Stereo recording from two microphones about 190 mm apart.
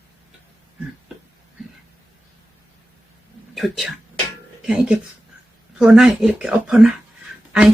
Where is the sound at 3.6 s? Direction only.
Centre (ahead or behind).